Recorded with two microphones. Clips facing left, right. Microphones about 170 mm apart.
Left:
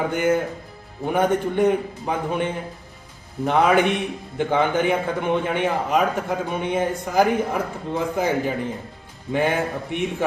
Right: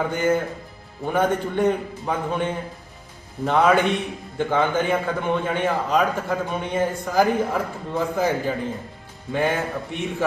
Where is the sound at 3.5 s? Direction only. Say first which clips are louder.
Even; 15° left (ahead or behind).